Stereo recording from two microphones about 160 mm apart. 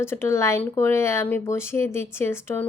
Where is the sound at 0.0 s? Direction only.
15° left (ahead or behind).